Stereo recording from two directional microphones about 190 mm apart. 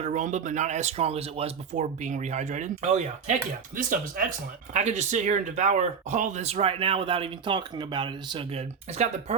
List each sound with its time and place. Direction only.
0.0 s speech: 40° right (ahead or behind)